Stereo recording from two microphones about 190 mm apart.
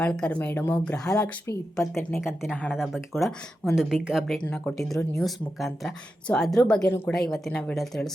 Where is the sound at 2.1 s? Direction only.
15° left (ahead or behind).